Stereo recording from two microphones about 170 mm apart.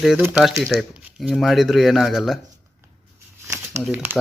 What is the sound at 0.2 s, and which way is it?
Speech, 10° right (ahead or behind).